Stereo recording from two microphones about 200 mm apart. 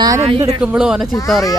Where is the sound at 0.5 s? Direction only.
5° right (ahead or behind).